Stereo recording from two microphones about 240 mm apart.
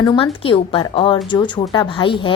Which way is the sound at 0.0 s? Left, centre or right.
Centre.